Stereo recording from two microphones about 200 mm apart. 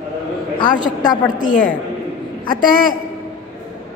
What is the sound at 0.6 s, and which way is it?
Speech, 20° left (ahead or behind).